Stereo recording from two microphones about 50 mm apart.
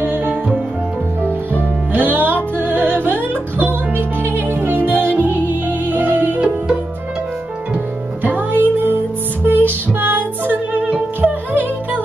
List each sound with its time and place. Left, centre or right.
0.0 s music: right
2.0 s music: right
8.2 s music: right